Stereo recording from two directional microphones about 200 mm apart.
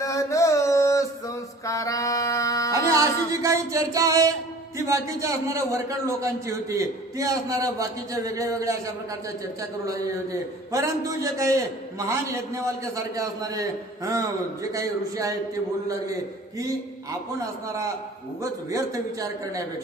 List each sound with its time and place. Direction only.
0.0 s a sound: 15° left (ahead or behind)
2.7 s speech: 15° right (ahead or behind)
11.3 s speech: 15° right (ahead or behind)
18.4 s speech: 15° right (ahead or behind)